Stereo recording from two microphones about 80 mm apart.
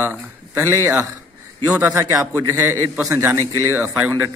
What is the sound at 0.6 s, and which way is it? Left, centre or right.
Speech, right.